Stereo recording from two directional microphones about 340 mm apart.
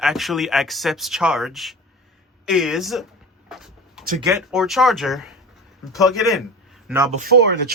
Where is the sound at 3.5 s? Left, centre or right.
Centre.